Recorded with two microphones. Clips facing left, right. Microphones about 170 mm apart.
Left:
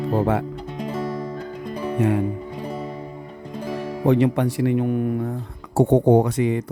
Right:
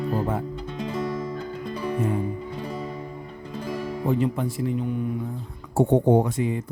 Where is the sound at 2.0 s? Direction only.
85° left.